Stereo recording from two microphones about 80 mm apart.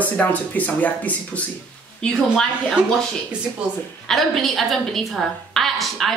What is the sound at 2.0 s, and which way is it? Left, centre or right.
Speech, centre.